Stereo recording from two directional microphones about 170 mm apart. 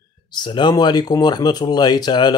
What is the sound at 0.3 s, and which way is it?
Speech, 25° left (ahead or behind).